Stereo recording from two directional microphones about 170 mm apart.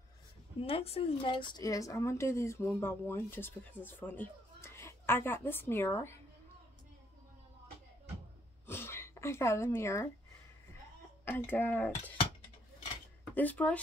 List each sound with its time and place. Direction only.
0.6 s speech: 35° left (ahead or behind); by 6.1 s 15° left (ahead or behind)
8.6 s a sound: 15° left (ahead or behind)
11.2 s speech: 10° left (ahead or behind)
13.3 s speech: 10° left (ahead or behind)